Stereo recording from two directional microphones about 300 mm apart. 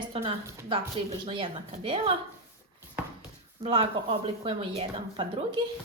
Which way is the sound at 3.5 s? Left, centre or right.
Centre.